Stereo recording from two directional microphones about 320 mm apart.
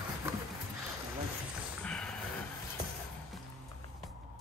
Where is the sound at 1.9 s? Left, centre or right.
Centre.